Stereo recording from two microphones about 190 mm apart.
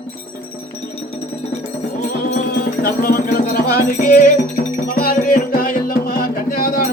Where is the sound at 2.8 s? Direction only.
50° left (ahead or behind).